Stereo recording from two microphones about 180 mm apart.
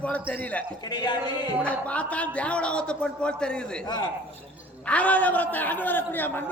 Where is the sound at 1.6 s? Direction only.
5° left (ahead or behind).